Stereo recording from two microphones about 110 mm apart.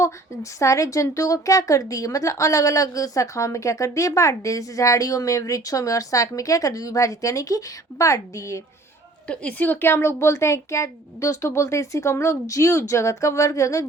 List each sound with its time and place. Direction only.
0.6 s a woman's voice: 30° left (ahead or behind)
9.2 s a woman's voice: 10° left (ahead or behind); by 13.8 s 30° left (ahead or behind)